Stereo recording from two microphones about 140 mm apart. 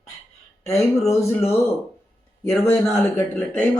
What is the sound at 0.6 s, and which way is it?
Speech, 50° left (ahead or behind).